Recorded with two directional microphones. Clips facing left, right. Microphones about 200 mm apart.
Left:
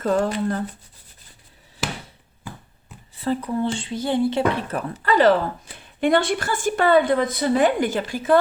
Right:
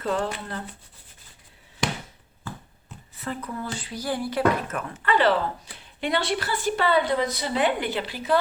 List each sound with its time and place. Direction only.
0.0 s a woman's voice: 45° left (ahead or behind)
1.8 s a sound: 5° left (ahead or behind)
3.2 s a woman's voice: 30° left (ahead or behind); by 8.4 s 50° left (ahead or behind)